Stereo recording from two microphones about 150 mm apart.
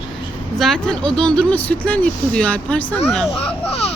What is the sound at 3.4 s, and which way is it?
Speech, 40° left (ahead or behind).